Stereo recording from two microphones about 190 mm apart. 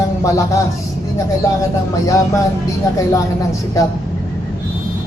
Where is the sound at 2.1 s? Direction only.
15° left (ahead or behind).